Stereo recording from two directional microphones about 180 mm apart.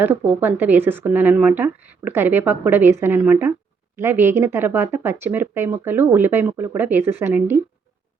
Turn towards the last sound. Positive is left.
turn(degrees=-15)  # may be behind; listen again after turning